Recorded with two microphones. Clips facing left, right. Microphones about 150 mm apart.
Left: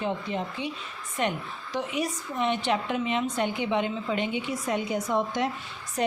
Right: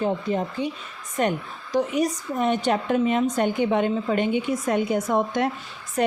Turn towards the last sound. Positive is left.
turn(degrees=-55)  # may be behind; listen again after turning